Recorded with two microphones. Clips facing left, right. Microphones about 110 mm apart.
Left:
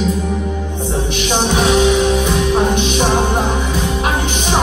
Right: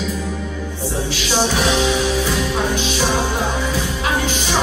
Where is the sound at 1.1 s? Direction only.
20° left (ahead or behind).